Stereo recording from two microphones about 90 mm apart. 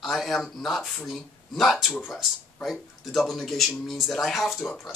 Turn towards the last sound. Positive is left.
turn(degrees=0)  # may be behind; listen again after turning